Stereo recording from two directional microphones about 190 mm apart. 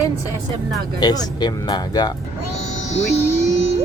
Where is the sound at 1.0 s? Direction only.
20° left (ahead or behind).